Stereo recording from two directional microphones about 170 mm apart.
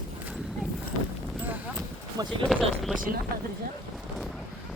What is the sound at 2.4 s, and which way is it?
Speech, centre (ahead or behind).